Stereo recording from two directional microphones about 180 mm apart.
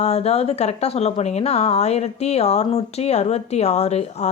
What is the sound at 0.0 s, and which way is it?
Speech, 35° left (ahead or behind).